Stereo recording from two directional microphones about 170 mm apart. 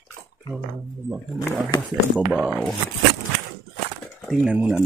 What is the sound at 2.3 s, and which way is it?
Speech, centre (ahead or behind).